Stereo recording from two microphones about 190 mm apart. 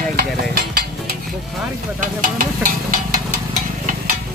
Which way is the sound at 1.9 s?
45° right (ahead or behind).